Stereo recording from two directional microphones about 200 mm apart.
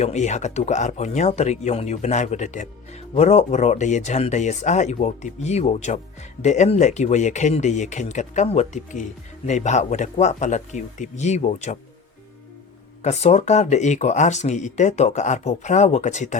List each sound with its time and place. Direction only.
0.0 s speech: 35° left (ahead or behind)
13.0 s speech: 35° left (ahead or behind)